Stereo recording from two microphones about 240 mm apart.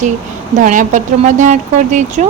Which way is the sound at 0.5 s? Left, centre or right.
Right.